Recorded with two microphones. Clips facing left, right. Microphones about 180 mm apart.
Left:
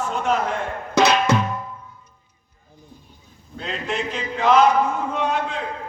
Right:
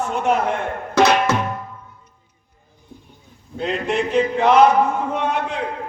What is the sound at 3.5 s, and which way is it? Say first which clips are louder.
A man's voice: right 6 dB; 55° right (ahead or behind).